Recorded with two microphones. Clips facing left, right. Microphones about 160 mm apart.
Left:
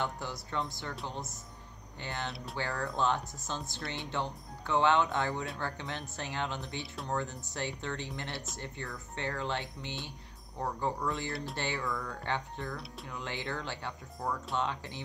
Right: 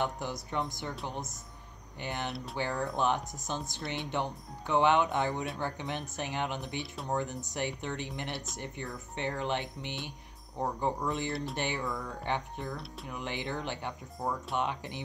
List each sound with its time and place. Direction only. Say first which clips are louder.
0.0 s speech: right 3 dB; 15° right (ahead or behind)